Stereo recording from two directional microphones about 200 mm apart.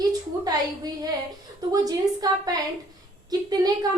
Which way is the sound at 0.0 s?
20° right (ahead or behind).